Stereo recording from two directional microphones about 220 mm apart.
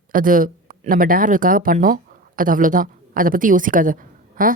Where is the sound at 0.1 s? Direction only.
40° right (ahead or behind).